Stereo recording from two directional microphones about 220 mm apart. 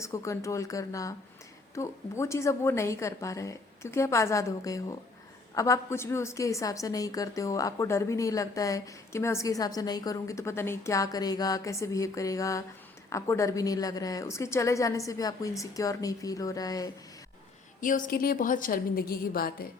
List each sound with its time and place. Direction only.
0.0 s a woman's voice: 15° left (ahead or behind)
17.7 s a woman's voice: 35° left (ahead or behind)